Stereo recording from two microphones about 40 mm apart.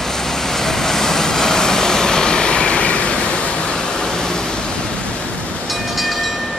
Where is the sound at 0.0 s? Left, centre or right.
Centre.